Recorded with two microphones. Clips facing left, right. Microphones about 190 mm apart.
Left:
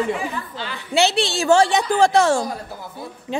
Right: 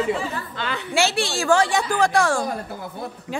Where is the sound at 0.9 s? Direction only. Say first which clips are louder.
Left 4 dB; 20° left (ahead or behind).